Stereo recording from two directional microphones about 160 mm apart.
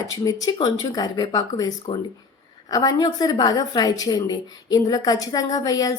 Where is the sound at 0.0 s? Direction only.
20° left (ahead or behind).